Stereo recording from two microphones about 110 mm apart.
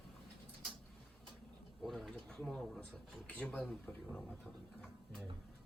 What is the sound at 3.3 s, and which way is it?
Speech, 15° left (ahead or behind).